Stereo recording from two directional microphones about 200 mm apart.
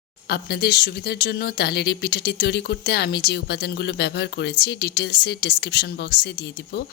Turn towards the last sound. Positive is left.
turn(degrees=55)  # may be behind; listen again after turning